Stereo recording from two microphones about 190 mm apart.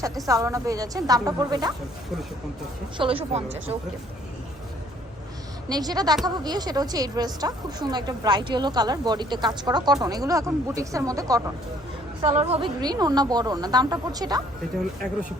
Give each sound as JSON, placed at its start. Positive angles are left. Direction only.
{"t": 0.3, "sound": "speech", "side_deg": -15}
{"t": 3.0, "sound": "speech", "side_deg": -30}
{"t": 5.6, "sound": "speech", "side_deg": -20}
{"t": 12.2, "sound": "speech", "side_deg": -35}